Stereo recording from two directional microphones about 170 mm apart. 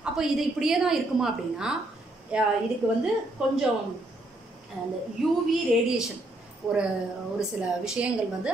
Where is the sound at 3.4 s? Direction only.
5° right (ahead or behind).